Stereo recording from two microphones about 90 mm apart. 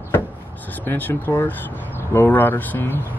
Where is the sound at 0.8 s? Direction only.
25° left (ahead or behind).